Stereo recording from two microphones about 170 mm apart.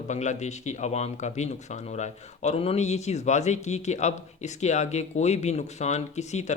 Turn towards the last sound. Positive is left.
turn(degrees=40)  # may be behind; listen again after turning